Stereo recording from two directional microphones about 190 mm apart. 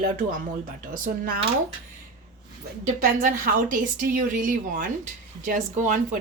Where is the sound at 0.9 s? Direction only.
50° right (ahead or behind).